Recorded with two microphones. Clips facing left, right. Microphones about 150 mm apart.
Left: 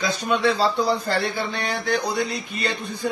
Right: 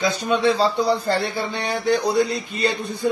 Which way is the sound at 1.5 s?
25° right (ahead or behind).